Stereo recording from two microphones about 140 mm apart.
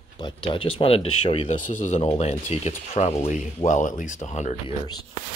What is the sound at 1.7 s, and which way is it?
Speech, 55° left (ahead or behind).